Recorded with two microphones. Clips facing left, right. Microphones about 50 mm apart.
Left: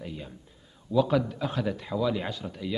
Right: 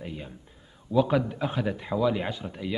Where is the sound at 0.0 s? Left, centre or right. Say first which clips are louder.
Right 1 dB; centre.